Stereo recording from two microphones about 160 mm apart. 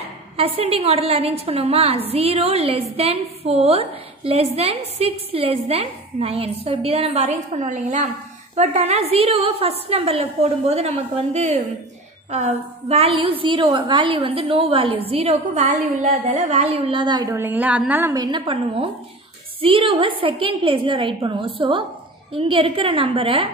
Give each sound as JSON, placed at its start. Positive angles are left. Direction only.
{"t": 0.4, "sound": "a woman's voice", "side_deg": -35}
{"t": 18.1, "sound": "a woman's voice", "side_deg": -25}